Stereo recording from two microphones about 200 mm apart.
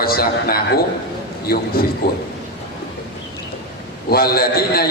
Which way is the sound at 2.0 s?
50° left (ahead or behind).